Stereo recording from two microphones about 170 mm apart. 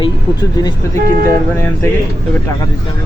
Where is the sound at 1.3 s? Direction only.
15° left (ahead or behind).